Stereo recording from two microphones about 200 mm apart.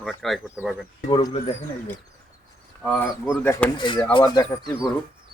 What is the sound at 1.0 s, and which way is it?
Speech, 25° left (ahead or behind).